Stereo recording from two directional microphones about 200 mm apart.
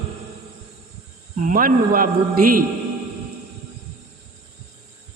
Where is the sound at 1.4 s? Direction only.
45° right (ahead or behind).